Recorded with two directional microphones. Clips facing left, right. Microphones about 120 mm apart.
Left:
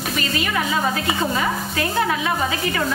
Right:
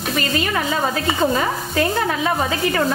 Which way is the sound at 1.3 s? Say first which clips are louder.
Right 3 dB; 35° right (ahead or behind).